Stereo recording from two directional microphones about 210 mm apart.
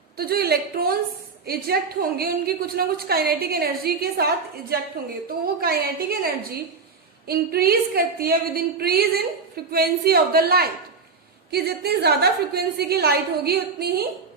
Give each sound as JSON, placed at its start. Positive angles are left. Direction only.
{"t": 0.2, "sound": "a woman's voice", "side_deg": -50}
{"t": 5.5, "sound": "a woman's voice", "side_deg": -45}